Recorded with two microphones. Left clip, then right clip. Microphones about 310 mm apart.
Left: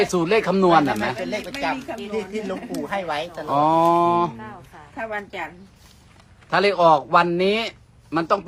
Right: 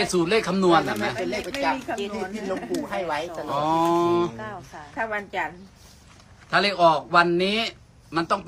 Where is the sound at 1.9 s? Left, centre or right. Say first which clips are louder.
Right 3 dB; centre.